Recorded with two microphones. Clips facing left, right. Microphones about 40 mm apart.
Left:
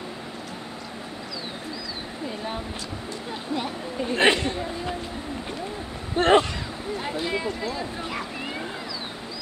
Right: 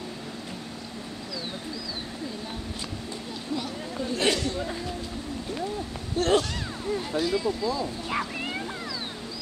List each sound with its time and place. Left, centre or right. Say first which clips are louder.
3.5 s speech: left 3 dB; left
6.1 s speech: left 5 dB; left